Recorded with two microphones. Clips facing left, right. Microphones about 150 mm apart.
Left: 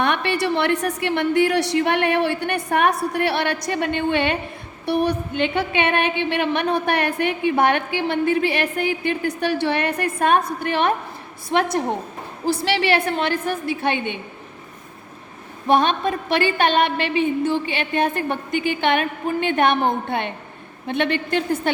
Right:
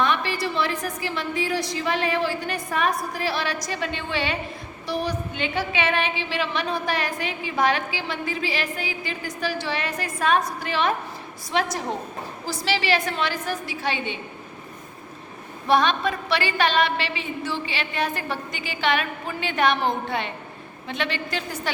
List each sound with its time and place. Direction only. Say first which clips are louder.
0.0 s a woman's voice: left 3 dB; 65° left (ahead or behind)
15.6 s a woman's voice: left 3 dB; 50° left (ahead or behind)